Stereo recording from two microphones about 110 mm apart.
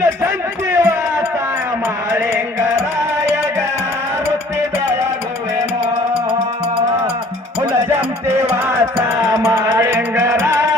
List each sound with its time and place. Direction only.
0.0 s a sound: 20° right (ahead or behind)
2.0 s music: 20° right (ahead or behind)
8.4 s music: 20° right (ahead or behind)
9.2 s music: 30° right (ahead or behind)